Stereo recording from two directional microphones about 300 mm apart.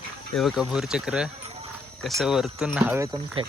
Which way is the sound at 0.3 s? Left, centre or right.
Centre.